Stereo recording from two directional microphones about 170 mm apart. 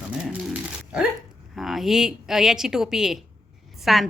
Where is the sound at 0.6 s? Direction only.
5° right (ahead or behind).